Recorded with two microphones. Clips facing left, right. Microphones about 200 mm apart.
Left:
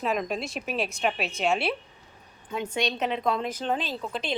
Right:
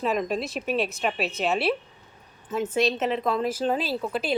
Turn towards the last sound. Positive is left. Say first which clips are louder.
# right 5 dB
turn(degrees=-5)  # may be behind; listen again after turning